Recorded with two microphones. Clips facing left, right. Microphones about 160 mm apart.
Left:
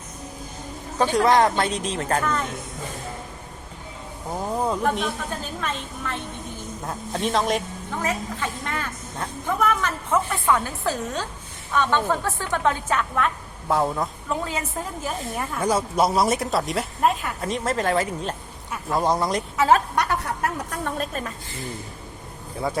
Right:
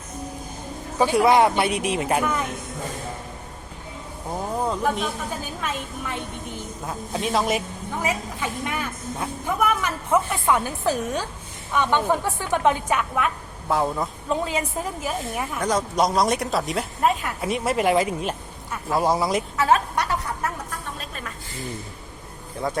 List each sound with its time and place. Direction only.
0.9 s speech: 10° right (ahead or behind)
4.6 s speech: centre (ahead or behind)
14.3 s a woman's voice: 20° right (ahead or behind)
15.6 s speech: 5° left (ahead or behind)
19.5 s a woman's voice: 30° left (ahead or behind)
20.0 s a sound: 60° left (ahead or behind)
21.0 s a woman's voice: 40° left (ahead or behind)